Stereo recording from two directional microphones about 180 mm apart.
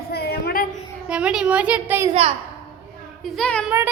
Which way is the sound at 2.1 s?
35° right (ahead or behind).